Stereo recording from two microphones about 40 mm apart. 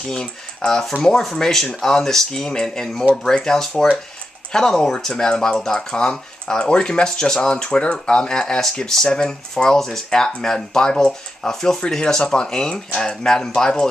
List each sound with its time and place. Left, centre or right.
0.1 s speech: centre